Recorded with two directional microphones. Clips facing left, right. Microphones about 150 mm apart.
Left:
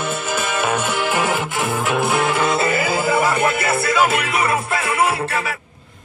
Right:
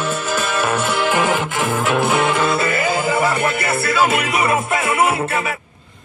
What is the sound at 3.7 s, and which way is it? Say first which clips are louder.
Music: even; 20° left (ahead or behind).